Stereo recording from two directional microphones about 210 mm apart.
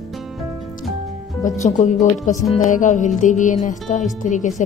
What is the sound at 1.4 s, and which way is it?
Speech, 35° left (ahead or behind).